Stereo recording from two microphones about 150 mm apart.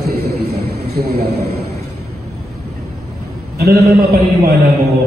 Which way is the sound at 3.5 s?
90° right.